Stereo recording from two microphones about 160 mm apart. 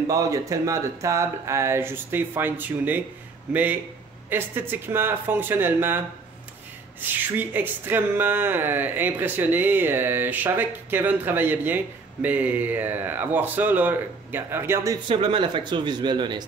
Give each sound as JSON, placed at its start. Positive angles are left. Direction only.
{"t": 0.1, "sound": "speech", "side_deg": -20}
{"t": 15.0, "sound": "speech", "side_deg": -35}